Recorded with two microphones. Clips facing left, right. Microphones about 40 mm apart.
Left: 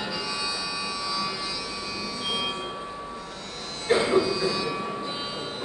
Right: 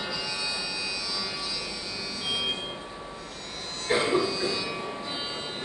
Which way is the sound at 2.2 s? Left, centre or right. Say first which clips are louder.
Even; centre.